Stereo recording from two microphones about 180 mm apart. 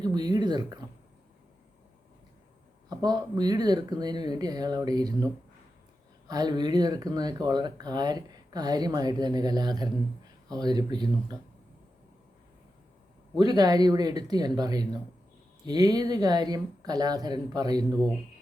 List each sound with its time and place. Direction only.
0.0 s speech: 20° right (ahead or behind)
2.9 s speech: 20° right (ahead or behind)
13.4 s speech: 20° right (ahead or behind)